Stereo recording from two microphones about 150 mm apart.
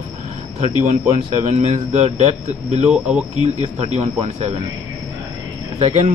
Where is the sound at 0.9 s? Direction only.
45° right (ahead or behind).